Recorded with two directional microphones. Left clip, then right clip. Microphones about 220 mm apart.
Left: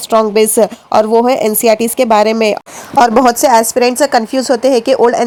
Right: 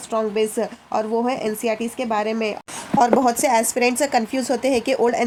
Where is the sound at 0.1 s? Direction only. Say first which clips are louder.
Left 11 dB; 40° left (ahead or behind).